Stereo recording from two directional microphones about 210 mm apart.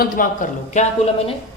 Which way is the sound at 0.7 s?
30° left (ahead or behind).